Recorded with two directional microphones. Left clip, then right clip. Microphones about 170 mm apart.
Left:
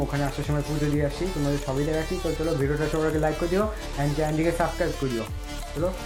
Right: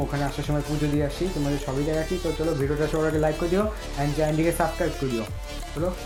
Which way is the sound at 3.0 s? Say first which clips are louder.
Right 1 dB; 15° right (ahead or behind).